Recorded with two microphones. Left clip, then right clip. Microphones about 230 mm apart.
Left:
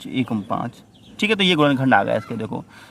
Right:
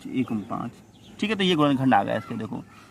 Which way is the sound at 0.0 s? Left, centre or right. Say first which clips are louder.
Left 4 dB; left.